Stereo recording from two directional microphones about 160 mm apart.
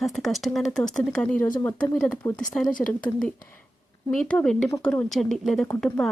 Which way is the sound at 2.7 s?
60° left (ahead or behind).